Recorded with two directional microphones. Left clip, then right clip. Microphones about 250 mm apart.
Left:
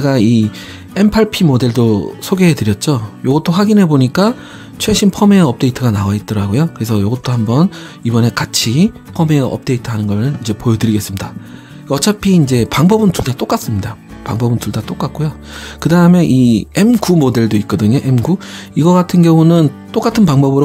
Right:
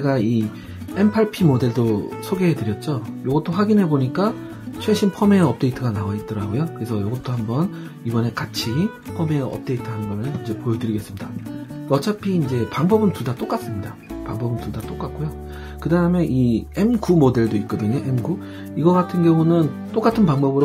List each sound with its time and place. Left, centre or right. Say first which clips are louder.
0.0 s speech: left 8 dB; left